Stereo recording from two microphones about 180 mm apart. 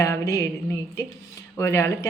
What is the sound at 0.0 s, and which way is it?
Speech, 15° left (ahead or behind).